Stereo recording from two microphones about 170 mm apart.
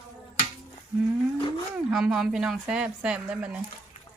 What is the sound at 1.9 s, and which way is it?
Speech, 5° right (ahead or behind).